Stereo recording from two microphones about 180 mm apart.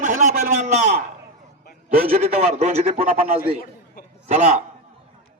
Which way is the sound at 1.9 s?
50° right (ahead or behind).